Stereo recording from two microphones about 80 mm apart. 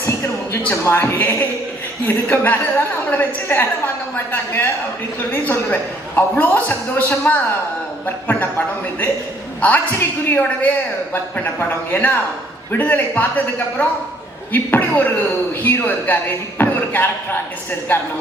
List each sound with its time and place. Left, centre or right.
0.6 s a man's voice: left
11.9 s a man's voice: left